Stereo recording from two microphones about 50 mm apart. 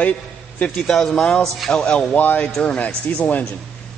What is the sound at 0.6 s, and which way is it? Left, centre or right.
A man's voice, centre.